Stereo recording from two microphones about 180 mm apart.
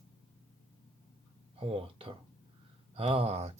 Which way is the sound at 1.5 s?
30° right (ahead or behind).